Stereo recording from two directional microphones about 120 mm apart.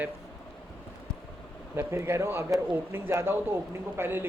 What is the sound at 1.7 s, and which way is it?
A man's voice, 20° right (ahead or behind).